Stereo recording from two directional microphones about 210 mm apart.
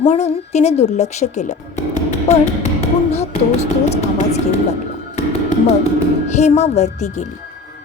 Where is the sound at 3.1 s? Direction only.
30° left (ahead or behind).